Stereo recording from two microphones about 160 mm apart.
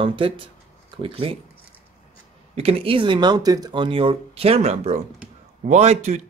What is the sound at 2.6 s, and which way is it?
A man's voice, 35° right (ahead or behind).